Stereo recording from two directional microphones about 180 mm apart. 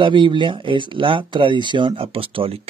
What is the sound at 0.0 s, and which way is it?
Speech, 25° right (ahead or behind).